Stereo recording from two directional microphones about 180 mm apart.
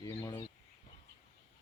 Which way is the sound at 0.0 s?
20° left (ahead or behind).